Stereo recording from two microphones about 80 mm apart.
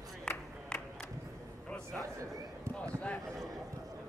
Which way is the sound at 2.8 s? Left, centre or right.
Centre.